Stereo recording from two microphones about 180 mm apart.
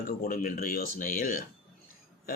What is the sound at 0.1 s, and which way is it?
Speech, 55° left (ahead or behind).